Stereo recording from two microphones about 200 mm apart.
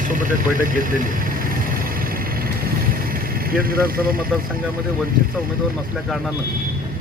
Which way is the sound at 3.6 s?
45° right (ahead or behind).